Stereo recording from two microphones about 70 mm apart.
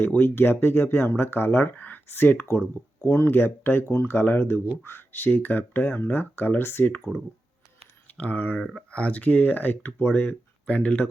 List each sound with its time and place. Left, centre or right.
0.0 s speech: left
3.0 s speech: left
8.0 s speech: left